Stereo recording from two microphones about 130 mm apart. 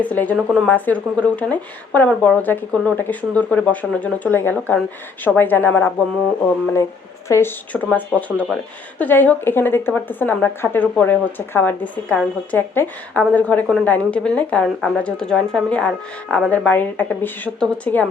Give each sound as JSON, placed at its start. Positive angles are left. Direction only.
{"t": 0.0, "sound": "speech", "side_deg": 10}
{"t": 7.3, "sound": "speech", "side_deg": 20}